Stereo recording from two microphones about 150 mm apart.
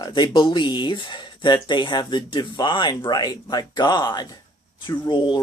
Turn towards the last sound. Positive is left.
turn(degrees=30)  # may be behind; listen again after turning